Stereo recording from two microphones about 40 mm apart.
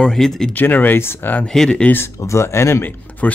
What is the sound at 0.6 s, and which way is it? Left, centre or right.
Speech, left.